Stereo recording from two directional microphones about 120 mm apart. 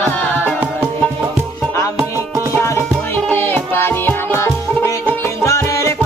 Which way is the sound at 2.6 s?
20° left (ahead or behind).